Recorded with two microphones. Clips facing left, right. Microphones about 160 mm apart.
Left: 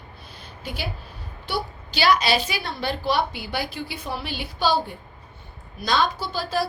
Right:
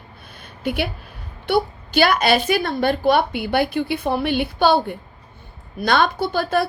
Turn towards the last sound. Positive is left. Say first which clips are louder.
# right 6 dB
turn(degrees=-60)  # may be behind; listen again after turning